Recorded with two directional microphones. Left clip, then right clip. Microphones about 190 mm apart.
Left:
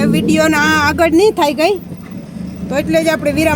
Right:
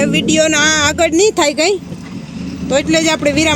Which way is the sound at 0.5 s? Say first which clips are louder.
Even; 30° right (ahead or behind).